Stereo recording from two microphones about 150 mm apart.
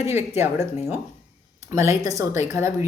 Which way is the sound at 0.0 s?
15° right (ahead or behind).